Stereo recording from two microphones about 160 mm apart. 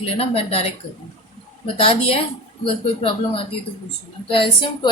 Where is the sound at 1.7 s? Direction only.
35° left (ahead or behind).